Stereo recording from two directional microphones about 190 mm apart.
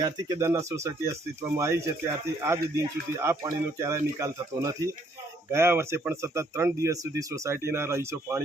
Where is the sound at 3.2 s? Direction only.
15° right (ahead or behind).